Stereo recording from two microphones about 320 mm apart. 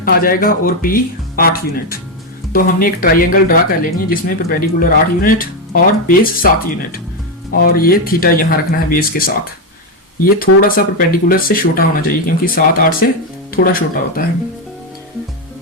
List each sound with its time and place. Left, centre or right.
0.0 s speech: left
7.5 s speech: left